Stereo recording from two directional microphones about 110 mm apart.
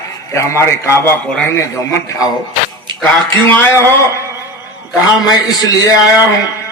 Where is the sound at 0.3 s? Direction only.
25° left (ahead or behind).